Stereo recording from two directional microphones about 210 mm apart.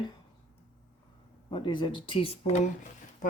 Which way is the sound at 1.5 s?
20° left (ahead or behind).